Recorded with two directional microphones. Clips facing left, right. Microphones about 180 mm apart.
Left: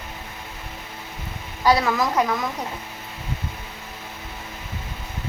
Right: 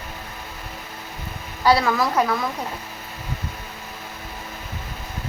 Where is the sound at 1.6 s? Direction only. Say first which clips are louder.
Right 1 dB; 15° left (ahead or behind).